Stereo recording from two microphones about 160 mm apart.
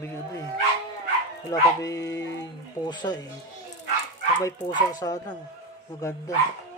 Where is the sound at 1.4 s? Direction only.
20° left (ahead or behind).